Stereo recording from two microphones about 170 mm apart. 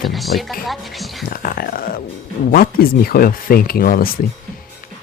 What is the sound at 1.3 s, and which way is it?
Speech, 60° left (ahead or behind).